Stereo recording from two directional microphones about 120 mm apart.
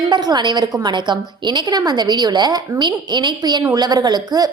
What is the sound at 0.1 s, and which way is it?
A woman's voice, 35° right (ahead or behind).